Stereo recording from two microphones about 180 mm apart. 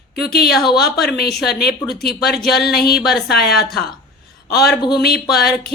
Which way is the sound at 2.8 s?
60° left (ahead or behind).